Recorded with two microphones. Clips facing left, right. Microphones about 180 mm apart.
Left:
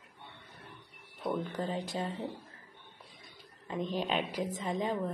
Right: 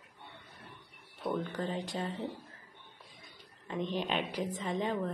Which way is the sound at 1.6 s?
40° left (ahead or behind).